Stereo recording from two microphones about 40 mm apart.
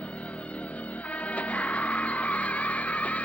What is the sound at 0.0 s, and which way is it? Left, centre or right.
Music, left.